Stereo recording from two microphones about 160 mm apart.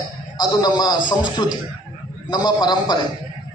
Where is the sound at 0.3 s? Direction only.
25° left (ahead or behind).